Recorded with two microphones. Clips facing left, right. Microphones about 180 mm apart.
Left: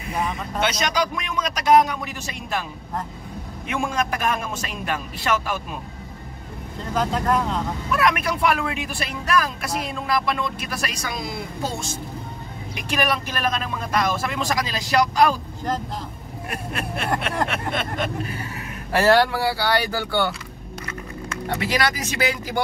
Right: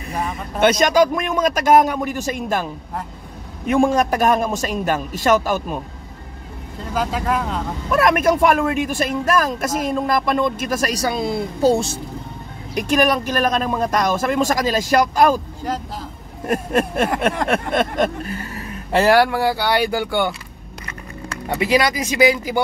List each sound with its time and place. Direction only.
0.6 s a man's voice: 50° right (ahead or behind)
6.9 s speech: 5° right (ahead or behind)
7.9 s speech: 45° right (ahead or behind)
12.7 s speech: 45° right (ahead or behind)
16.4 s speech: 45° right (ahead or behind)
18.9 s speech: 20° right (ahead or behind)